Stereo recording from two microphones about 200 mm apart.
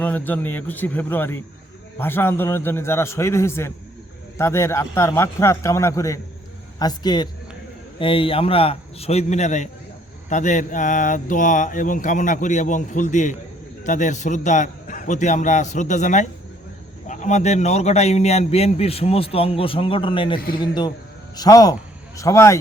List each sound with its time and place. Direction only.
0.0 s a man's voice: 10° left (ahead or behind)